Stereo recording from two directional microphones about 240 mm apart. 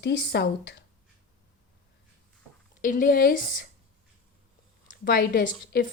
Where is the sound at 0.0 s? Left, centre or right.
Left.